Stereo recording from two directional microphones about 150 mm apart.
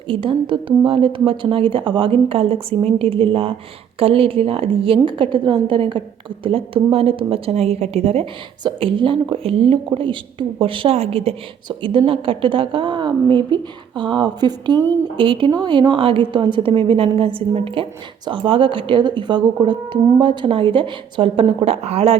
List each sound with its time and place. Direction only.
0.1 s a woman's voice: 35° right (ahead or behind)